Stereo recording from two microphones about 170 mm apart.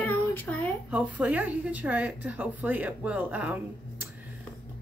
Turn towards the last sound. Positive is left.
turn(degrees=-10)  # may be behind; listen again after turning